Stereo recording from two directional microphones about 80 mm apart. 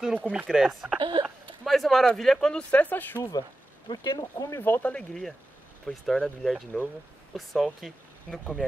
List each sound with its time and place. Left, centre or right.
0.5 s speech: centre
0.9 s speech: right
1.6 s speech: centre
2.7 s speech: left
3.2 s speech: left
4.6 s speech: left
4.9 s speech: centre